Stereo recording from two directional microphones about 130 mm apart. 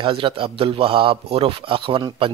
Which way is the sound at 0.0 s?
40° right (ahead or behind).